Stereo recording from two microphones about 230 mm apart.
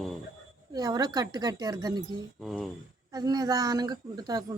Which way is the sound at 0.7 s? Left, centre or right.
Centre.